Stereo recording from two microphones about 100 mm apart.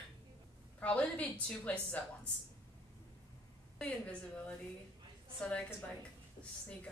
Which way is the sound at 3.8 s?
10° left (ahead or behind).